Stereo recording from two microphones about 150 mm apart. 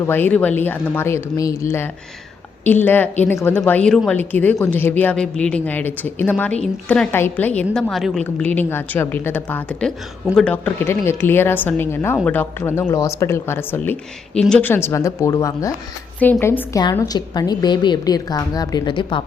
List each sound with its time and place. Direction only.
0.0 s a woman's voice: 15° left (ahead or behind); by 19.2 s 30° left (ahead or behind)